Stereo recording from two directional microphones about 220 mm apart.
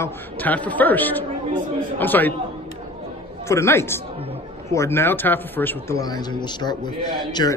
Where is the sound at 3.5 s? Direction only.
10° left (ahead or behind).